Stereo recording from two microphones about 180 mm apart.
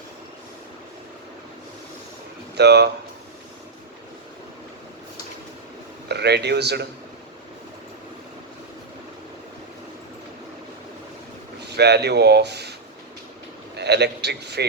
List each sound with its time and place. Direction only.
2.6 s speech: 65° right (ahead or behind)
6.1 s speech: 65° right (ahead or behind)
11.7 s speech: 65° right (ahead or behind)
13.7 s a man's voice: 65° right (ahead or behind)